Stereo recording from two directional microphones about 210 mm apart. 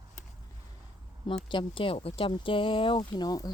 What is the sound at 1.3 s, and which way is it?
Speech, 25° left (ahead or behind).